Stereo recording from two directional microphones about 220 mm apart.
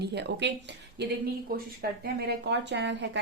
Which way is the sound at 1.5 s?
40° right (ahead or behind).